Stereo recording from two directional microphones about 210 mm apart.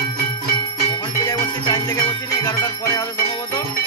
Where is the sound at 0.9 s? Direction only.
20° left (ahead or behind).